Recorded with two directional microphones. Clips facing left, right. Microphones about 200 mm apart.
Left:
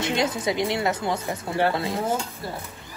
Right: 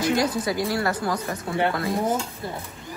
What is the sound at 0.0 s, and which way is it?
A woman's voice, 25° left (ahead or behind).